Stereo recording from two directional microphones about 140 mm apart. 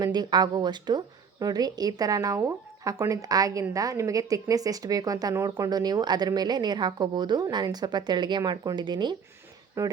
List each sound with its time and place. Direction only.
0.0 s speech: 30° right (ahead or behind)
9.8 s speech: 20° right (ahead or behind)